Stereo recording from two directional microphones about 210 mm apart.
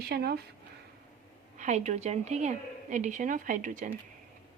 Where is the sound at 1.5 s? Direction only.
35° right (ahead or behind).